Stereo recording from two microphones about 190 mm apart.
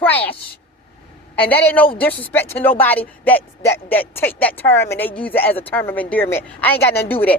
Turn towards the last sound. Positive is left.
turn(degrees=10)  # may be behind; listen again after turning